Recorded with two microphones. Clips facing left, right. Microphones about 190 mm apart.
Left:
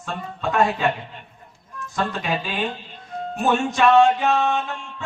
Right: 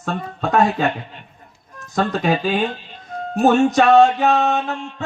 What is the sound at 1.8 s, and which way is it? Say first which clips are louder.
Speech: right 5 dB; 40° right (ahead or behind).